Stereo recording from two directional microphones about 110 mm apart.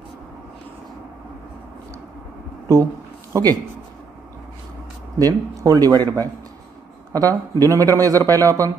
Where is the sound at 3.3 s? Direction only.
35° right (ahead or behind).